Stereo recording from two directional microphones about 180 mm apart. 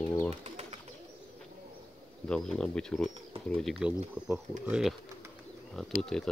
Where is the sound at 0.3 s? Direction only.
35° right (ahead or behind).